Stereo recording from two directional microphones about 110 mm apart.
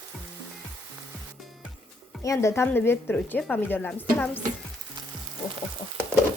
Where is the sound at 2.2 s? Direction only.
25° left (ahead or behind); by 4.4 s 10° left (ahead or behind).